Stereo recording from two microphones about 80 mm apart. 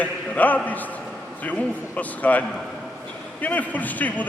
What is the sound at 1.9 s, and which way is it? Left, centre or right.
A man's voice, centre.